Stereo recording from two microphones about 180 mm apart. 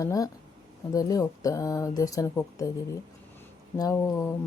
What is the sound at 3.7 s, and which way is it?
Speech, 20° left (ahead or behind).